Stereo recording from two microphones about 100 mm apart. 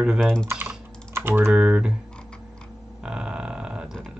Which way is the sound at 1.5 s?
10° right (ahead or behind).